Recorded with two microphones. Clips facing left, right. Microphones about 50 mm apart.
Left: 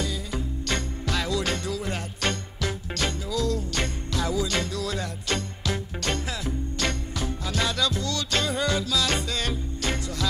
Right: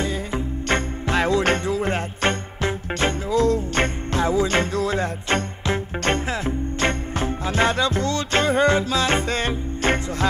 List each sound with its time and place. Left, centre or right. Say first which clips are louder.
0.0 s music: right 5 dB; right